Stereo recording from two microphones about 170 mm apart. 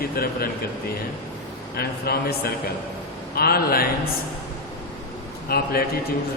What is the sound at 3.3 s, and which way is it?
Speech, 65° left (ahead or behind).